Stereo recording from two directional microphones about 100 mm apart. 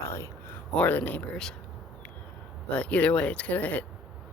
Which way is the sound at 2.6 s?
10° left (ahead or behind).